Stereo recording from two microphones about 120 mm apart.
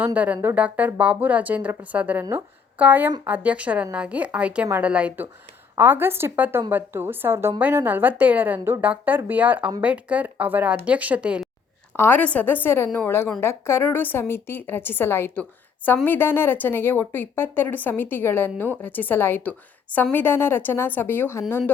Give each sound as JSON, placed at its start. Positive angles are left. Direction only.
{"t": 0.0, "sound": "a woman's voice", "side_deg": -15}
{"t": 11.9, "sound": "a woman's voice", "side_deg": 15}